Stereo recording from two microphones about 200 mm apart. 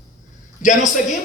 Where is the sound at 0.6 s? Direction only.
40° left (ahead or behind).